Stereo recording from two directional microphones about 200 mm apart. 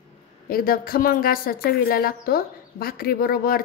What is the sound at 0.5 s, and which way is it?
A woman's voice, 45° left (ahead or behind).